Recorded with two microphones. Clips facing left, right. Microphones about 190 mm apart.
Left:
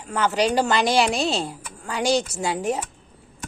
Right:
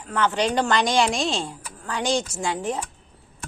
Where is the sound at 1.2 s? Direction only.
35° left (ahead or behind).